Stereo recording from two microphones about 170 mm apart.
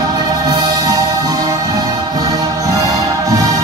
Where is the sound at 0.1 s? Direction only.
20° right (ahead or behind).